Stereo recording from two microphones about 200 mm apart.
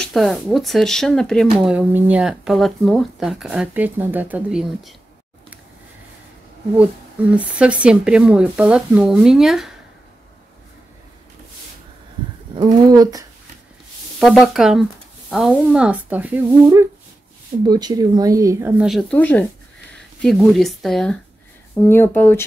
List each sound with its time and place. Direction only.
0.0 s speech: centre (ahead or behind)
6.8 s speech: 5° right (ahead or behind)
12.5 s speech: 20° right (ahead or behind)
14.2 s speech: centre (ahead or behind)
17.6 s speech: 20° right (ahead or behind)
18.9 s speech: 5° left (ahead or behind)